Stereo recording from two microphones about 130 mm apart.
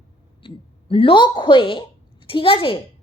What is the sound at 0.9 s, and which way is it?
A woman's voice, 45° left (ahead or behind).